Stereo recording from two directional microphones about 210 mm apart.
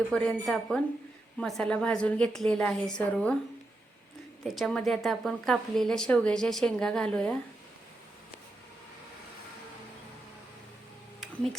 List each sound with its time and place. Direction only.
0.1 s a woman's voice: 5° left (ahead or behind)
4.4 s a woman's voice: centre (ahead or behind)